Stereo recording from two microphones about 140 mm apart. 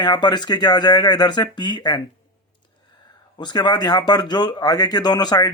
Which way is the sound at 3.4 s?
30° left (ahead or behind).